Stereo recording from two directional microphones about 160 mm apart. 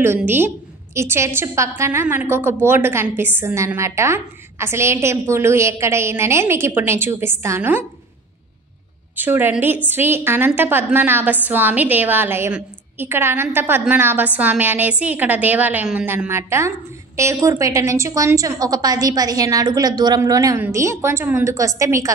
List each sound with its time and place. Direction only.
0.9 s a woman's voice: 15° right (ahead or behind)
9.1 s a woman's voice: 15° right (ahead or behind)